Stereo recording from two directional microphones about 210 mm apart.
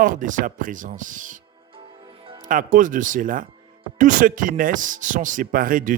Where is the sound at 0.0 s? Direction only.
40° right (ahead or behind).